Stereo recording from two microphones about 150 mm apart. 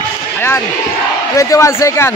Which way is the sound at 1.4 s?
20° left (ahead or behind).